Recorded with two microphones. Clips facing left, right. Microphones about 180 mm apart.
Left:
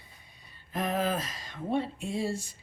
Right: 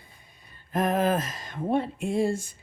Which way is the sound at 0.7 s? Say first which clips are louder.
Right 6 dB; 50° right (ahead or behind).